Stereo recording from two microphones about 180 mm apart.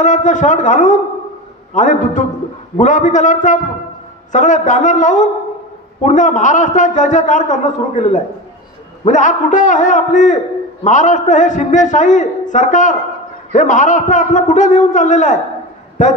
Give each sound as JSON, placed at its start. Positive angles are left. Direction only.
{"t": 0.0, "sound": "a man's voice", "side_deg": 45}